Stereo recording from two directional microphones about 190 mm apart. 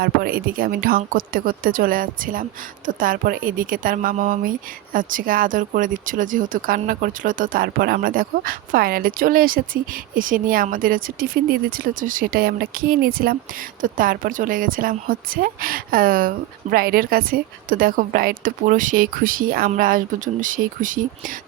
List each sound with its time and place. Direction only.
0.0 s speech: 50° right (ahead or behind)